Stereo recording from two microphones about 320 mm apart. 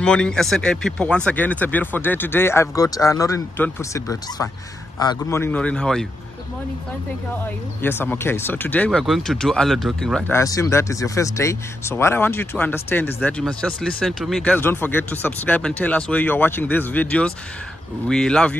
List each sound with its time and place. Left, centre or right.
0.0 s speech: centre
7.4 s speech: centre